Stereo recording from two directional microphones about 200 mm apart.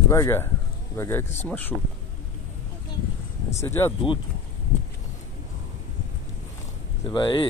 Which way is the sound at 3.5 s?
10° left (ahead or behind).